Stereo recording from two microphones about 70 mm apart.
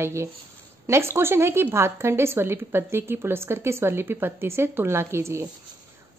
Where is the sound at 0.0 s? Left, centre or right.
Right.